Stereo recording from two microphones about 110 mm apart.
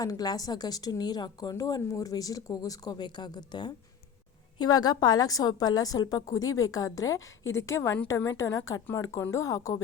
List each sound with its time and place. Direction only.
0.0 s a woman's voice: 35° left (ahead or behind)